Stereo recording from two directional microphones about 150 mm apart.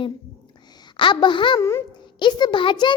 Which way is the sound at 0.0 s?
30° left (ahead or behind).